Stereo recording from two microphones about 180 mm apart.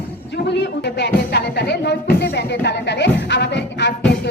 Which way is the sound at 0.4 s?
70° left (ahead or behind).